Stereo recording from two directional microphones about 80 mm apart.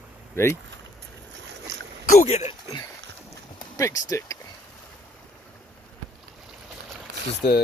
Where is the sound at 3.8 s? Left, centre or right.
Left.